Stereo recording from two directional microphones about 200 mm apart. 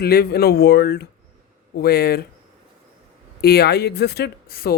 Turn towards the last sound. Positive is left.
turn(degrees=50)  # may be behind; listen again after turning